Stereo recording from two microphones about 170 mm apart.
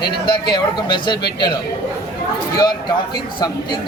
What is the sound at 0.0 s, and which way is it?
A man's voice, 25° left (ahead or behind).